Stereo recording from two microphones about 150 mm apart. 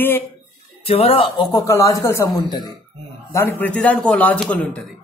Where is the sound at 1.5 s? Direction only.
20° left (ahead or behind).